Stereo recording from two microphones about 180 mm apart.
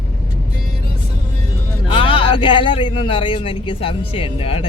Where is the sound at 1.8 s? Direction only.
30° left (ahead or behind).